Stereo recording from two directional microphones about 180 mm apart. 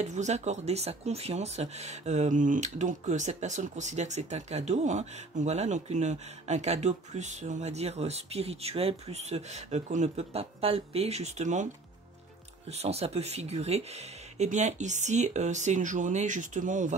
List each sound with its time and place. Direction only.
0.0 s speech: 40° right (ahead or behind)
12.7 s speech: 35° right (ahead or behind)